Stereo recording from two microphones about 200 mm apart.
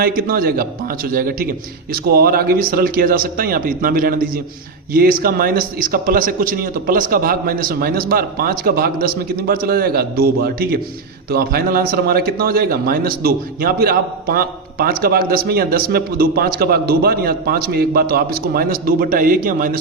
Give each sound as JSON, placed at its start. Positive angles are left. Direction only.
{"t": 0.0, "sound": "a man's voice", "side_deg": -45}